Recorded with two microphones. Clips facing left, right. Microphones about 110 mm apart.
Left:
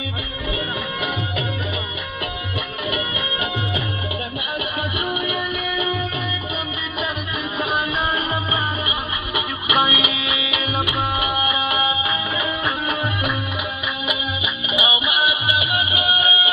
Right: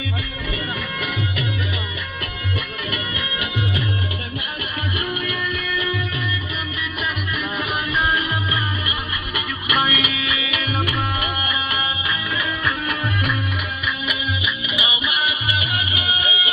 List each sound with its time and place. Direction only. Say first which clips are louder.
5.2 s music: left 2 dB; 20° left (ahead or behind)
7.7 s music: right 1 dB; 25° left (ahead or behind)
9.3 s music: left 2 dB; 20° left (ahead or behind)